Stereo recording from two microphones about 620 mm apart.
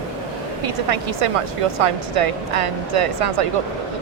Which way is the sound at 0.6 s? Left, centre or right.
Right.